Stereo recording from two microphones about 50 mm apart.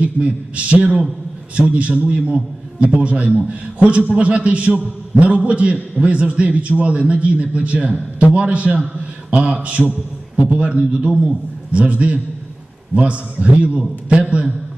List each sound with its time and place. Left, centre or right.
0.0 s a man's voice: right